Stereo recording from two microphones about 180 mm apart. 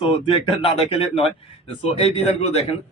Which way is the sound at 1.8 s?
35° left (ahead or behind).